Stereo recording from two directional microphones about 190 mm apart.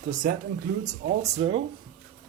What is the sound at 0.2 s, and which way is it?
Speech, 45° right (ahead or behind).